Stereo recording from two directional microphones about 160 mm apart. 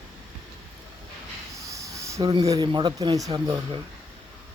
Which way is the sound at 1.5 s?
20° right (ahead or behind).